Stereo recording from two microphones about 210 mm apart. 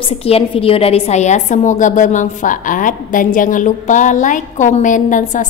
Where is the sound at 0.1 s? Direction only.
25° left (ahead or behind).